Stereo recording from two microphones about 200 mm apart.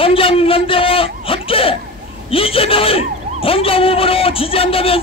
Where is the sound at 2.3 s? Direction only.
25° left (ahead or behind).